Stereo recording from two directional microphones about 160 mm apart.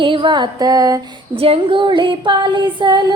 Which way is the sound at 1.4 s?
35° right (ahead or behind).